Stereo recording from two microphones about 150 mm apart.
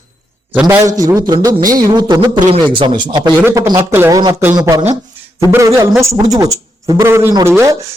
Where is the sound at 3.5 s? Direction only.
20° right (ahead or behind).